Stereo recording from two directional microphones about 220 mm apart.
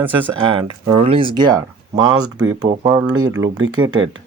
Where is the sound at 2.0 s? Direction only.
75° right (ahead or behind).